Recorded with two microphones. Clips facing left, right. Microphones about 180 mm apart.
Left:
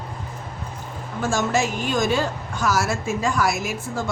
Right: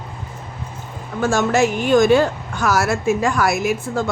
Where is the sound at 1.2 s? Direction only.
60° right (ahead or behind).